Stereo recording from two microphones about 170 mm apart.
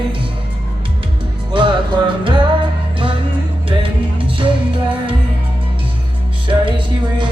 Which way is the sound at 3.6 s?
30° right (ahead or behind).